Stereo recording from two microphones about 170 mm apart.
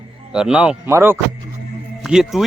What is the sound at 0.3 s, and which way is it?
Speech, 5° right (ahead or behind).